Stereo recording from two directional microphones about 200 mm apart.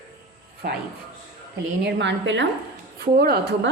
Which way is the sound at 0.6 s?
45° right (ahead or behind).